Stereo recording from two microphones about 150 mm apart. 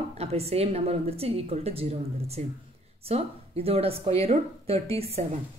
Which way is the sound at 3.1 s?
40° right (ahead or behind).